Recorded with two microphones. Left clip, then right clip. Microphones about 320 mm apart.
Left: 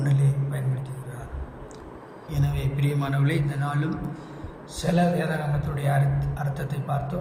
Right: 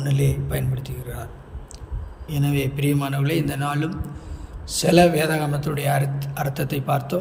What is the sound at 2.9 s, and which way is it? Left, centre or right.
A man's voice, right.